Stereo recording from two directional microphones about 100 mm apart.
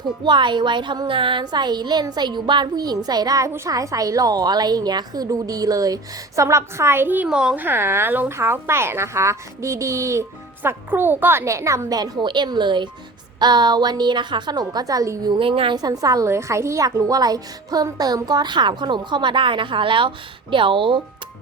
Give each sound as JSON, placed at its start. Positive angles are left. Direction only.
{"t": 0.3, "sound": "a woman's voice", "side_deg": -50}
{"t": 7.3, "sound": "a woman's voice", "side_deg": -10}
{"t": 7.6, "sound": "a woman's voice", "side_deg": -25}
{"t": 15.3, "sound": "a woman's voice", "side_deg": -60}
{"t": 15.8, "sound": "a woman's voice", "side_deg": -40}